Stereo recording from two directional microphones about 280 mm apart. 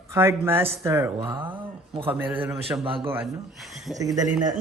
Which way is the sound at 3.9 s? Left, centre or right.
Centre.